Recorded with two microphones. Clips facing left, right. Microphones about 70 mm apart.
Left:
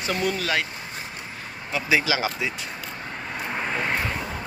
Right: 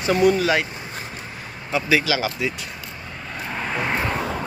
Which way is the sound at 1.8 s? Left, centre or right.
Left.